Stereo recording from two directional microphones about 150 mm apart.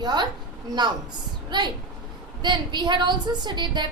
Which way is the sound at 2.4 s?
30° right (ahead or behind).